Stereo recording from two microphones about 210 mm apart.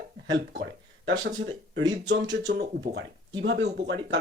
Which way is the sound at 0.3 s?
60° right (ahead or behind).